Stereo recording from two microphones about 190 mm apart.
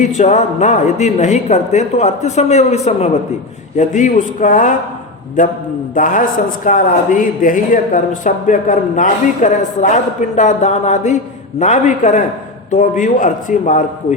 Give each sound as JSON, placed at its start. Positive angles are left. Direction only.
{"t": 0.0, "sound": "a man's voice", "side_deg": 40}